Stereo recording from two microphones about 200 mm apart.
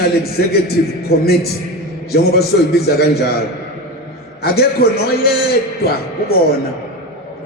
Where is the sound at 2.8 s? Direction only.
55° left (ahead or behind).